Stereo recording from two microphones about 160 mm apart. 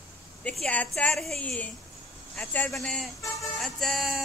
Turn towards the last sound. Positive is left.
turn(degrees=0)  # may be behind; listen again after turning